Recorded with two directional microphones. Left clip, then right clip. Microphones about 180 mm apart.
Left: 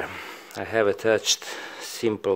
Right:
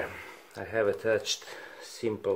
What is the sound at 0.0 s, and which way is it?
Speech, 50° left (ahead or behind).